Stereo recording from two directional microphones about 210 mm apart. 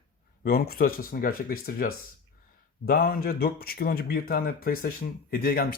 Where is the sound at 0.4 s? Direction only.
45° left (ahead or behind).